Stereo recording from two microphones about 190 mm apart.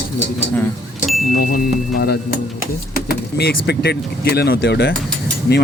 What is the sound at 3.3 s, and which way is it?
Speech, 60° left (ahead or behind).